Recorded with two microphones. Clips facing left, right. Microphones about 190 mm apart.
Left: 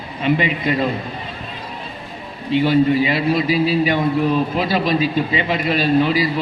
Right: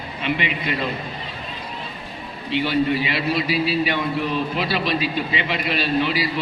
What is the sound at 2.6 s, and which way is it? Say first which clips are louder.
A man's voice: left 6 dB; 45° left (ahead or behind).